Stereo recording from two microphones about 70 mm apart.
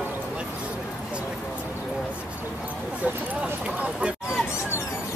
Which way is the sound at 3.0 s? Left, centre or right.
Centre.